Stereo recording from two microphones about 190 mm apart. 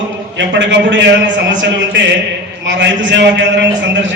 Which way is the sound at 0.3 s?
70° right (ahead or behind).